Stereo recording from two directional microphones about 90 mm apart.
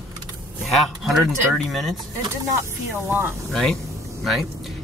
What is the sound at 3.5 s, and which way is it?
Speech, 5° left (ahead or behind).